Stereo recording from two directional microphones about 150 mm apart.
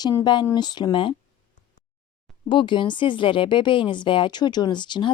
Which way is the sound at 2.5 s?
30° left (ahead or behind).